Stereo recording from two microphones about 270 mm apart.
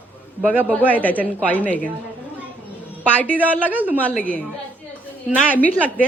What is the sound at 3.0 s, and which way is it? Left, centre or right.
Speech, centre.